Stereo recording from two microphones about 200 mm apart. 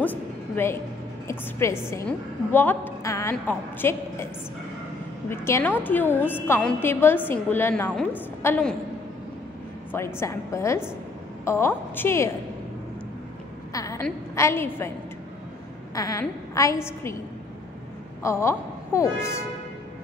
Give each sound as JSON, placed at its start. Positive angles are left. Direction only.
{"t": 0.0, "sound": "music", "side_deg": 10}
{"t": 1.2, "sound": "a woman's voice", "side_deg": 15}
{"t": 5.3, "sound": "a woman's voice", "side_deg": 10}
{"t": 9.9, "sound": "a woman's voice", "side_deg": 10}
{"t": 13.7, "sound": "a woman's voice", "side_deg": 15}
{"t": 15.9, "sound": "a woman's voice", "side_deg": 15}
{"t": 18.2, "sound": "a woman's voice", "side_deg": 15}